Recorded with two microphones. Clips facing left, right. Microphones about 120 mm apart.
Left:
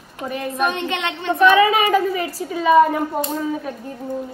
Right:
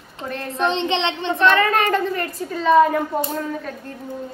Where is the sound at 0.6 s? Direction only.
25° right (ahead or behind).